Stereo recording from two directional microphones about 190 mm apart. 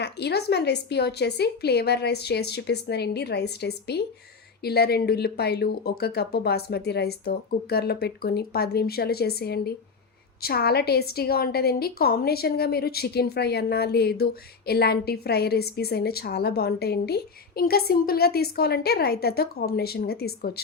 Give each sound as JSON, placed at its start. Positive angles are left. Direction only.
{"t": 0.0, "sound": "a woman's voice", "side_deg": 60}